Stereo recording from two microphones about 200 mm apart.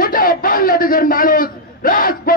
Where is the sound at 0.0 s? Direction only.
45° left (ahead or behind).